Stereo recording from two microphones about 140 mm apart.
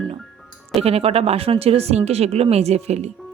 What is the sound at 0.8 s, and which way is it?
Speech, 45° right (ahead or behind).